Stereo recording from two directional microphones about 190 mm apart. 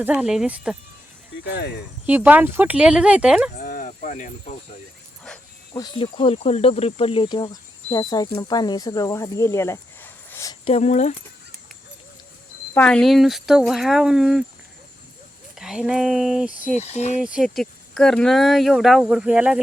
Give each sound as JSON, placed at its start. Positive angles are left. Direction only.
{"t": 0.0, "sound": "speech", "side_deg": -10}
{"t": 1.5, "sound": "speech", "side_deg": 60}
{"t": 2.0, "sound": "speech", "side_deg": -10}
{"t": 3.6, "sound": "cricket", "side_deg": 50}
{"t": 5.7, "sound": "speech", "side_deg": 25}
{"t": 10.7, "sound": "speech", "side_deg": 35}
{"t": 12.7, "sound": "speech", "side_deg": 5}
{"t": 15.5, "sound": "speech", "side_deg": -5}
{"t": 16.7, "sound": "speech", "side_deg": 35}
{"t": 17.2, "sound": "speech", "side_deg": -5}